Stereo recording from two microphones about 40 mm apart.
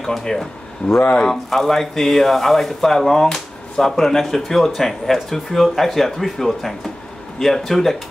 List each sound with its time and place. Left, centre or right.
0.2 s speech: centre
0.8 s speech: left
1.3 s speech: centre